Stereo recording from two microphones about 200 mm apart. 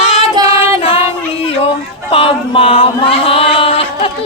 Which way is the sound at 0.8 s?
30° left (ahead or behind).